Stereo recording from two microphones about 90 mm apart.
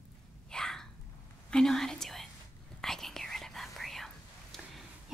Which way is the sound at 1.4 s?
5° left (ahead or behind).